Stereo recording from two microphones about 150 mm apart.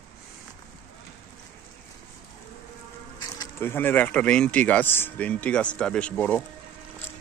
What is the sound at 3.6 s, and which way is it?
Speech, 15° left (ahead or behind).